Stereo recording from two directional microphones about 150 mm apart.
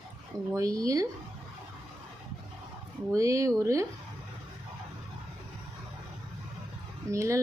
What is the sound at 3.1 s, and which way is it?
Speech, 20° right (ahead or behind).